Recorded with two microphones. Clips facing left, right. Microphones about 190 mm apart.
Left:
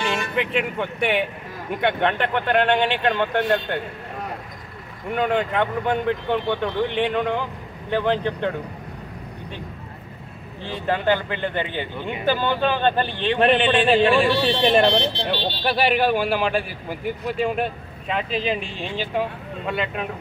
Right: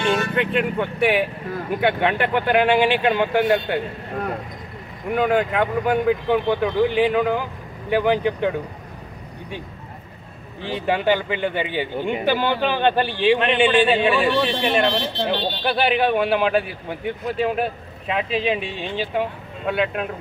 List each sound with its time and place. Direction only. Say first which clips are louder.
0.0 s speech: right 3 dB; centre (ahead or behind)
5.1 s speech: right 2 dB; 5° right (ahead or behind)
10.9 s speech: right 1 dB; 10° right (ahead or behind)
14.4 s speech: left 2 dB; 35° left (ahead or behind)
15.2 s speech: right 1 dB; centre (ahead or behind)